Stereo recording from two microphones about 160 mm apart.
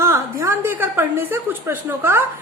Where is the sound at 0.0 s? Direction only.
15° right (ahead or behind).